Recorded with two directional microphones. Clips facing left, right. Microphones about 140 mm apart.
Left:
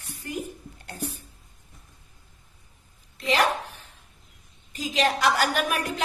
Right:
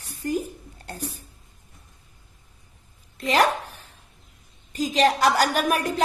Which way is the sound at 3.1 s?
45° right (ahead or behind).